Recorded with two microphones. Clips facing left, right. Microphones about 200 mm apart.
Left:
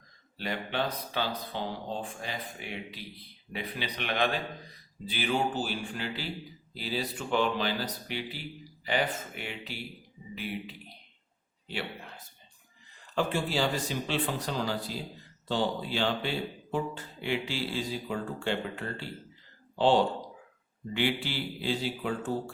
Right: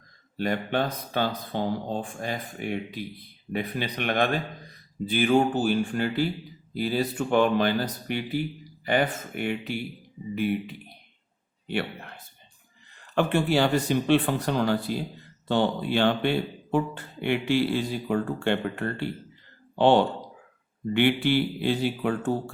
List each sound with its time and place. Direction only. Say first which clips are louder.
0.3 s speech: right 6 dB; 50° right (ahead or behind)
13.1 s speech: right 6 dB; 60° right (ahead or behind)